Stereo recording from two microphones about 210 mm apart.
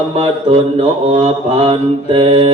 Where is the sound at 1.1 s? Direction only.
30° right (ahead or behind).